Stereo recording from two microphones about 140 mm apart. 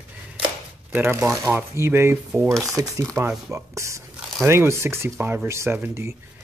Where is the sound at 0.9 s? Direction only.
15° right (ahead or behind).